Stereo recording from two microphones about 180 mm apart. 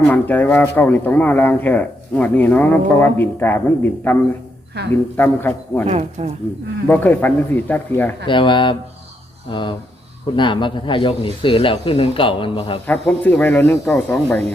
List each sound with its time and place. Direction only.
0.1 s speech: 10° left (ahead or behind)
4.8 s speech: 65° right (ahead or behind)
5.1 s speech: 10° left (ahead or behind)
5.9 s speech: 40° right (ahead or behind)
6.8 s speech: 10° left (ahead or behind)
8.3 s speech: 25° left (ahead or behind)
12.9 s speech: 10° left (ahead or behind)